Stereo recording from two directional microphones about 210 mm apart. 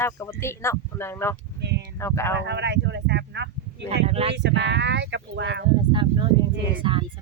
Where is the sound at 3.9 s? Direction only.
30° right (ahead or behind).